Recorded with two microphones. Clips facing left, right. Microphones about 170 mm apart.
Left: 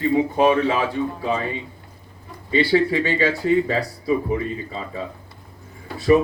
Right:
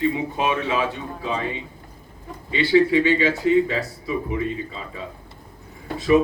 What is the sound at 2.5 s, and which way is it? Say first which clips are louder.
Speech: right 1 dB; 40° left (ahead or behind).